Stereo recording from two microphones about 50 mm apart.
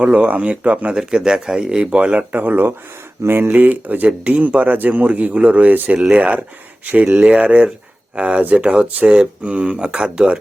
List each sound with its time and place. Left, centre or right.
0.0 s speech: right
0.9 s speech: centre; by 2.7 s right
3.2 s speech: right
3.5 s speech: right; by 10.3 s centre